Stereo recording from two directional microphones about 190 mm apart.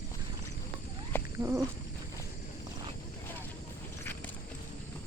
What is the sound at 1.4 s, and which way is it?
Speech, 15° right (ahead or behind).